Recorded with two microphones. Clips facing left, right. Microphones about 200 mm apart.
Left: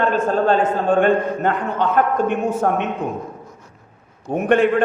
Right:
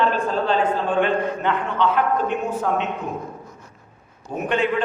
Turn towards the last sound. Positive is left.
turn(degrees=55)  # may be behind; listen again after turning